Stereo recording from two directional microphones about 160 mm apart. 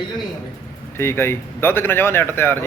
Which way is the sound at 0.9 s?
15° left (ahead or behind).